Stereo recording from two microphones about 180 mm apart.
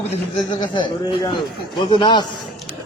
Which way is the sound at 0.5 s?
25° left (ahead or behind).